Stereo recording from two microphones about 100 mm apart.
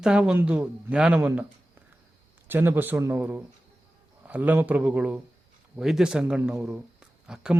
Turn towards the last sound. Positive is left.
turn(degrees=-5)  # may be behind; listen again after turning